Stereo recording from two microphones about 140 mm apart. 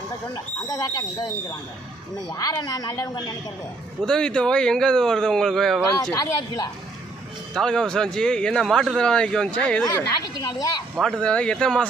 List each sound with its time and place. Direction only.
0.3 s a woman's voice: 25° left (ahead or behind)
2.3 s a woman's voice: 25° left (ahead or behind)
4.0 s a man's voice: 5° left (ahead or behind)
6.1 s a woman's voice: 30° left (ahead or behind)
7.5 s a man's voice: 5° left (ahead or behind)
10.2 s a woman's voice: 30° left (ahead or behind)
11.2 s speech: 5° left (ahead or behind)